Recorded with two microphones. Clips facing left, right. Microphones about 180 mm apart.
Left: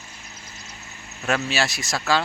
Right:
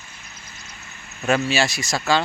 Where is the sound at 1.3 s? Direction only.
Centre (ahead or behind).